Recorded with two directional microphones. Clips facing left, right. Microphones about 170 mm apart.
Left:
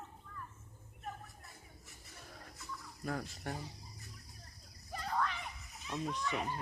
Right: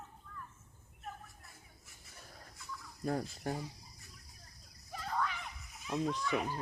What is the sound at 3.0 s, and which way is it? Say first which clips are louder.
Fowl: right 4 dB; 30° right (ahead or behind).